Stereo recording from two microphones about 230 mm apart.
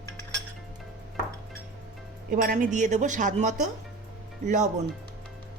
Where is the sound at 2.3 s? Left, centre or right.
Right.